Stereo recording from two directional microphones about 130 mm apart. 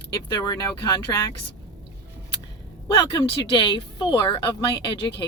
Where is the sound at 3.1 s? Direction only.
40° left (ahead or behind).